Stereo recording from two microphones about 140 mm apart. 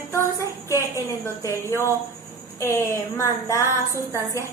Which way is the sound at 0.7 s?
15° left (ahead or behind).